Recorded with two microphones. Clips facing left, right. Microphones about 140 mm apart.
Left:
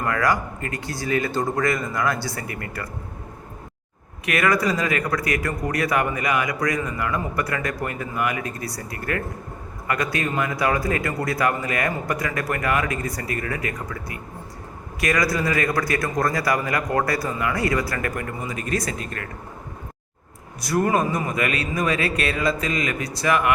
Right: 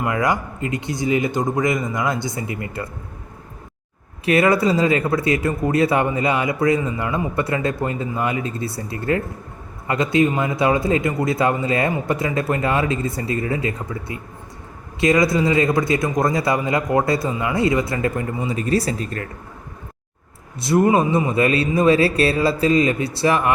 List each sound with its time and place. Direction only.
0.0 s speech: 20° right (ahead or behind)
4.3 s speech: 30° right (ahead or behind)
20.6 s speech: 25° right (ahead or behind)